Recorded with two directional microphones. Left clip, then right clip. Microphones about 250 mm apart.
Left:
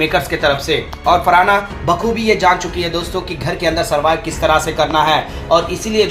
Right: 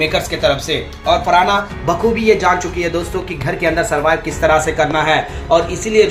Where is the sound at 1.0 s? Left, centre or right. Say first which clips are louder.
Left 1 dB; left.